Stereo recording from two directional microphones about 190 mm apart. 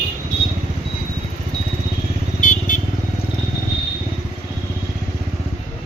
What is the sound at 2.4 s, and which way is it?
Vehicle, 40° left (ahead or behind).